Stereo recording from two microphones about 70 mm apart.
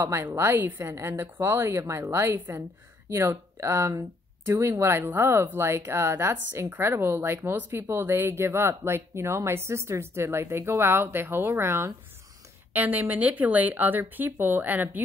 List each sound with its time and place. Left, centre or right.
0.2 s speech: right
12.7 s speech: right